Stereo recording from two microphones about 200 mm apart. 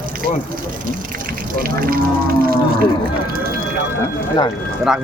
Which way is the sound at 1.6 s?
45° right (ahead or behind).